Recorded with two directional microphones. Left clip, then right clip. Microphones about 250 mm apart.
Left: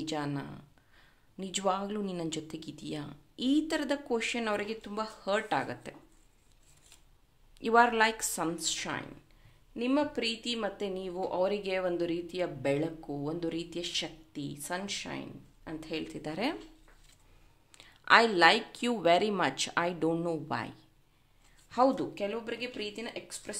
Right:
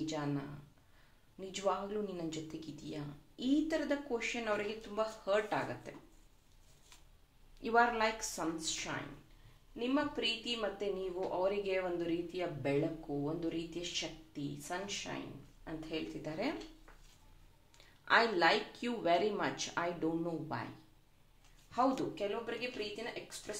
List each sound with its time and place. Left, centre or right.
0.0 s speech: left
1.4 s speech: left
7.5 s a woman's voice: left
17.7 s speech: left
21.6 s a woman's voice: left